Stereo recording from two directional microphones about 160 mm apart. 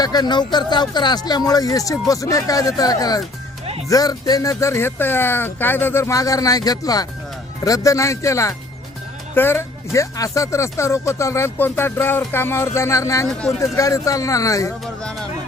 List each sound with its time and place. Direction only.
0.0 s speech: 25° left (ahead or behind)